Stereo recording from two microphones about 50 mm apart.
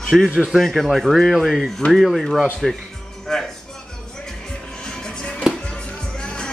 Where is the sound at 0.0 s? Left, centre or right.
Centre.